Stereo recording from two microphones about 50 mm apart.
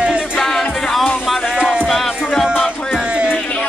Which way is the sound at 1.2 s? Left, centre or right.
Centre.